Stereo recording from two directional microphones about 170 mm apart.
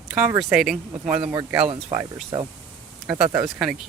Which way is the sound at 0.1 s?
5° right (ahead or behind).